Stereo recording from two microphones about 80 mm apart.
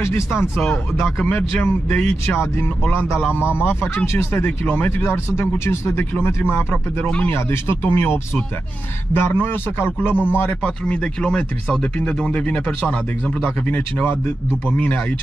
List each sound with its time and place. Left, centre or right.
0.0 s speech: left
0.6 s speech: centre
1.3 s a man's voice: left
3.8 s a man's voice: left
10.6 s a man's voice: centre